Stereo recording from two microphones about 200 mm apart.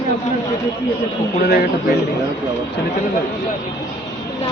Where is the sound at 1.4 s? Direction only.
50° left (ahead or behind).